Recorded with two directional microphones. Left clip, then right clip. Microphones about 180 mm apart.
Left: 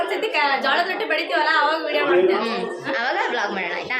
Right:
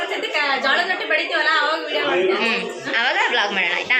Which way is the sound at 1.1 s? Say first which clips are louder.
Right 2 dB; 20° left (ahead or behind).